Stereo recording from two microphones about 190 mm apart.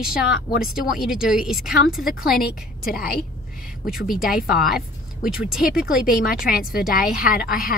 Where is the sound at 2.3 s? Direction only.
50° left (ahead or behind).